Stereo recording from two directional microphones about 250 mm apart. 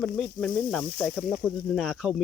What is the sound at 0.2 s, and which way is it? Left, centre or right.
Speech, centre.